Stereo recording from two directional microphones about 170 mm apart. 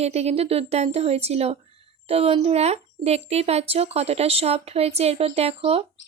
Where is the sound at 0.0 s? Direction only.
40° right (ahead or behind).